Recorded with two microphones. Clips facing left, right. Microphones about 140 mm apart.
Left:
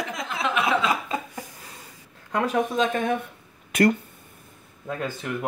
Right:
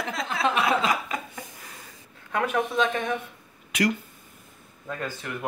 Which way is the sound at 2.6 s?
45° left (ahead or behind).